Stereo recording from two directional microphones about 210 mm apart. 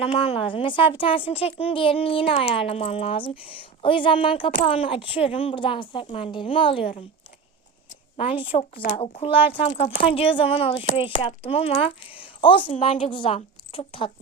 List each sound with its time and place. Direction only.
0.0 s speech: 25° left (ahead or behind)
8.1 s a woman's voice: 25° left (ahead or behind)